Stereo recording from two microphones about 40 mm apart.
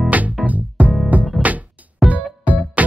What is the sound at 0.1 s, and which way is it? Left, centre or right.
Music, right.